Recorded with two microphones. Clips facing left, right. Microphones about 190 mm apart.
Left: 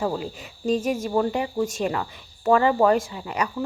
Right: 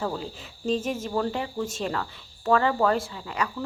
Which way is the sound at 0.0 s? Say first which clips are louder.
Left 4 dB; 10° left (ahead or behind).